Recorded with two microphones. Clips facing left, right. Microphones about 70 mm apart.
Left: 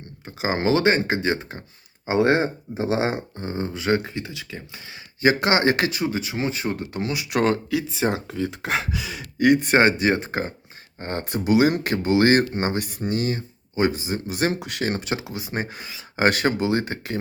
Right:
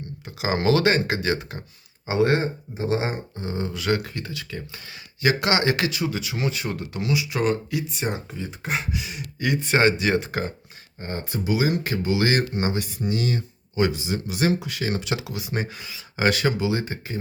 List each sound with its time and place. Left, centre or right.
0.3 s speech: left
2.9 s speech: left
3.3 s speech: left; by 4.8 s centre
5.2 s speech: left
7.3 s speech: left
9.4 s speech: left
11.0 s speech: left